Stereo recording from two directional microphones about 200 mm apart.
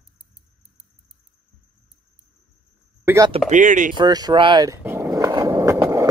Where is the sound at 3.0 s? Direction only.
15° right (ahead or behind).